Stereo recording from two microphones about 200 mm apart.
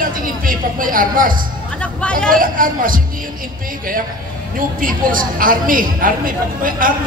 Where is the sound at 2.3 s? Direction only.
45° right (ahead or behind).